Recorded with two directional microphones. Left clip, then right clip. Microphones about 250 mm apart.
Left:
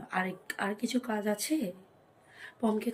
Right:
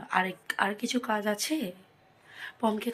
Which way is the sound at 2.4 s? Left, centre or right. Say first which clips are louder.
Right 2 dB; centre.